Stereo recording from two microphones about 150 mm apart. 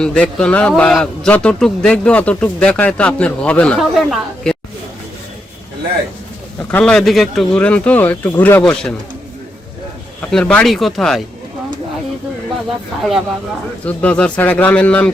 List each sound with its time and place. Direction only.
0.0 s a man's voice: 5° left (ahead or behind)
6.7 s a man's voice: 5° left (ahead or behind)
10.2 s speech: 10° left (ahead or behind)
13.0 s speech: centre (ahead or behind)
13.8 s a man's voice: 10° left (ahead or behind)